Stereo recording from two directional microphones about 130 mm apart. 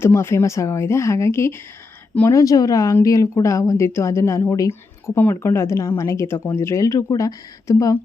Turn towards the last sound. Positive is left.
turn(degrees=25)  # may be behind; listen again after turning